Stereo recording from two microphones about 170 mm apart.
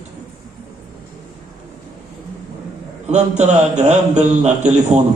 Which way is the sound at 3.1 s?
40° right (ahead or behind).